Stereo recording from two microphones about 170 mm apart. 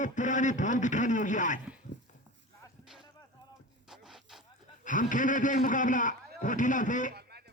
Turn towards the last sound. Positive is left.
turn(degrees=50)  # may be behind; listen again after turning